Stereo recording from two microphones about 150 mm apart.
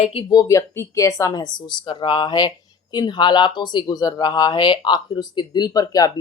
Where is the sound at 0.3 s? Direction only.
20° left (ahead or behind).